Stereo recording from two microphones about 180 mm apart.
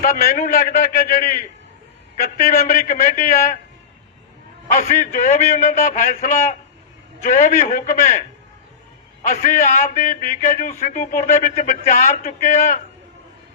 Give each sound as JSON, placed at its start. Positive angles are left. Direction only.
{"t": 0.0, "sound": "a man's voice", "side_deg": 50}
{"t": 4.7, "sound": "a man's voice", "side_deg": 45}
{"t": 9.2, "sound": "a man's voice", "side_deg": 45}